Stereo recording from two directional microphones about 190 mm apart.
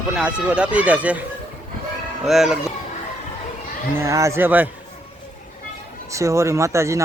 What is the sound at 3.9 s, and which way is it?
Speech, 15° right (ahead or behind).